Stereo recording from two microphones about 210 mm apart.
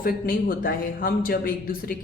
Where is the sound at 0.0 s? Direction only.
40° left (ahead or behind).